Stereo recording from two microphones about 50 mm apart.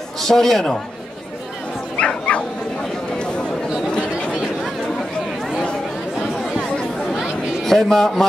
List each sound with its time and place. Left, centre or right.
0.2 s a man's voice: centre
2.0 s bow-wow: left
3.9 s chatter: left
7.2 s a sound: centre